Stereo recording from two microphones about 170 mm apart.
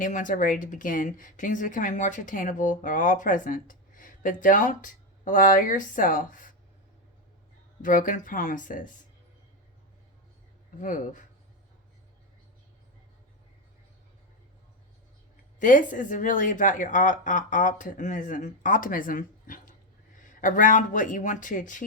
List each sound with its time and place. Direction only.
0.0 s a woman's voice: 50° left (ahead or behind)
7.8 s a woman's voice: 50° left (ahead or behind)
10.8 s a woman's voice: 50° left (ahead or behind)
15.5 s a woman's voice: 50° left (ahead or behind)